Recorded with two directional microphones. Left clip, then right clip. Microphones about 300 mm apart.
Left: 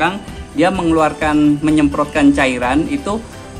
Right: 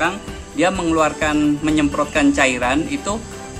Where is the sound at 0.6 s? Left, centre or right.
Centre.